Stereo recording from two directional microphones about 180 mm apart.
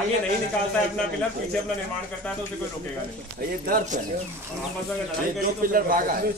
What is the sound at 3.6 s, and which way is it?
Speech, 50° right (ahead or behind).